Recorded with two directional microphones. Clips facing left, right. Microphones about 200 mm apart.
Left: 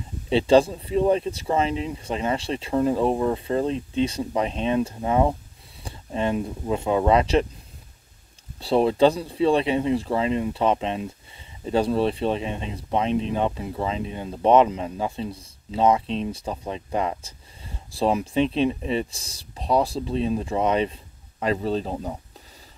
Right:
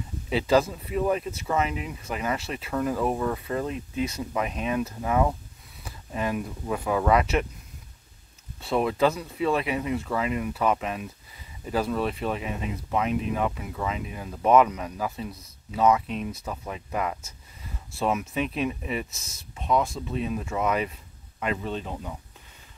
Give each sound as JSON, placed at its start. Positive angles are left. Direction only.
{"t": 0.3, "sound": "speech", "side_deg": 30}
{"t": 8.5, "sound": "speech", "side_deg": 30}